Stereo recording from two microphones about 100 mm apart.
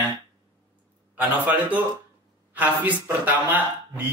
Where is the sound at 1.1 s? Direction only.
15° right (ahead or behind).